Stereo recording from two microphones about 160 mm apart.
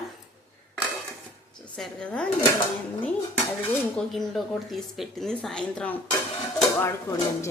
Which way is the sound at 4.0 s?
Centre (ahead or behind).